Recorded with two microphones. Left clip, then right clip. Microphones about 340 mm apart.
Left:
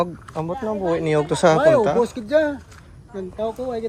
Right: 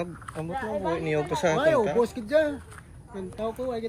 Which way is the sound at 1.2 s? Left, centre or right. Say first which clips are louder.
Left 7 dB; left.